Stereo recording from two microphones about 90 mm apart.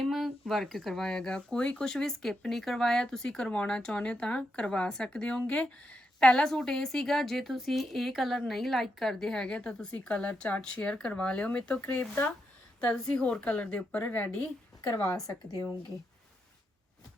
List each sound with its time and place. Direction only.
0.0 s speech: centre (ahead or behind); by 14.4 s 20° left (ahead or behind)
14.8 s a woman's voice: 40° left (ahead or behind)